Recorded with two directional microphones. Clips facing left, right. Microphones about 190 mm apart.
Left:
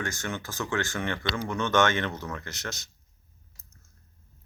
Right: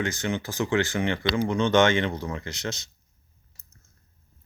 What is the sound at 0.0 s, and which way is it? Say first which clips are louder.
Speech: right 6 dB; 15° right (ahead or behind).